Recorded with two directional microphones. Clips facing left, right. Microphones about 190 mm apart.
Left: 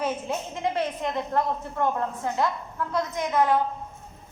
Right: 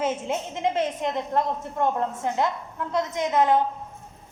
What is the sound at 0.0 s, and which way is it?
A woman's voice, 20° right (ahead or behind).